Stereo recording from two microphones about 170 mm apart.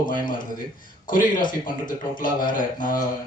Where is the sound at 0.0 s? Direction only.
55° left (ahead or behind).